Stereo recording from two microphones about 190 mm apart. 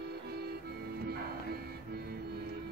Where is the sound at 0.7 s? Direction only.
55° right (ahead or behind).